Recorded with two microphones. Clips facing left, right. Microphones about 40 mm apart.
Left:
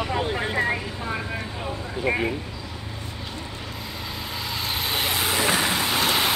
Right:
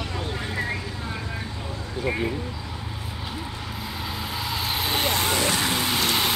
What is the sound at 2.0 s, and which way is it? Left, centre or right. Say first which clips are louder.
Speech: left 2 dB; left.